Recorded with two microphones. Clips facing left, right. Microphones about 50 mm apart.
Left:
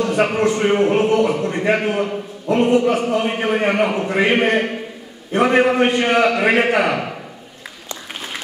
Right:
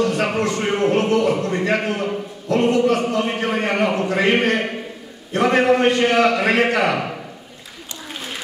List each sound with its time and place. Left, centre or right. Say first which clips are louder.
0.0 s a man's voice: left 2 dB; centre